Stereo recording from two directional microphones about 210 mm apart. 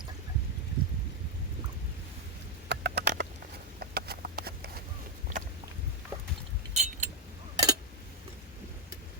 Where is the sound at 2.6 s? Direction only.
55° right (ahead or behind).